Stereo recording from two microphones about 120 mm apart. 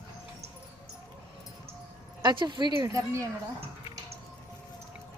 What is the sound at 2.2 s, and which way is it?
Speech, 40° right (ahead or behind).